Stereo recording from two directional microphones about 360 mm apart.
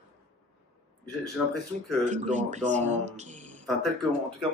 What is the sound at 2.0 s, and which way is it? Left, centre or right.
A woman's voice, right.